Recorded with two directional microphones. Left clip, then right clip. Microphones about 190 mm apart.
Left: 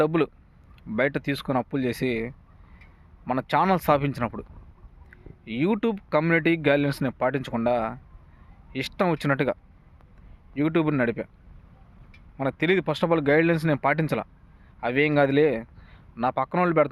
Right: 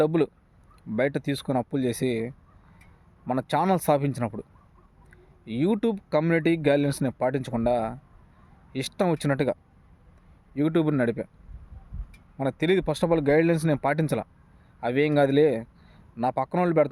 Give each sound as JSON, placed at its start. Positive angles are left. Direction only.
{"t": 0.0, "sound": "speech", "side_deg": -10}
{"t": 12.4, "sound": "a man's voice", "side_deg": -10}